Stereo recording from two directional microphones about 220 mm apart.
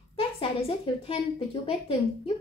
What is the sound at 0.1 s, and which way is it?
A woman's voice, 25° left (ahead or behind).